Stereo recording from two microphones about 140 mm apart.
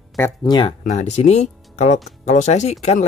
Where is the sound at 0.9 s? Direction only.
55° left (ahead or behind).